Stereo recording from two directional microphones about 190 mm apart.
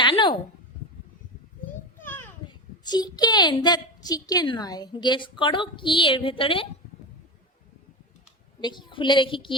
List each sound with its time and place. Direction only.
0.0 s a sound: 25° left (ahead or behind)
2.5 s a woman's voice: 20° left (ahead or behind)
8.6 s a woman's voice: 25° left (ahead or behind)